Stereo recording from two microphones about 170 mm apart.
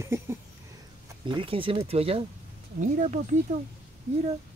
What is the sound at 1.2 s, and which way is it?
Speech, 30° right (ahead or behind).